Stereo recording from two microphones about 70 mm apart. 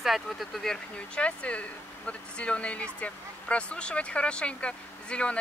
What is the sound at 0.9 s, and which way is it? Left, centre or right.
Speech, centre.